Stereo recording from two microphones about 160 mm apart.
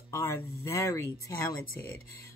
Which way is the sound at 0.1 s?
15° left (ahead or behind).